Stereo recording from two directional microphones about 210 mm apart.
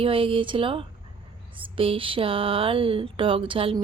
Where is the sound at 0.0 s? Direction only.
25° right (ahead or behind).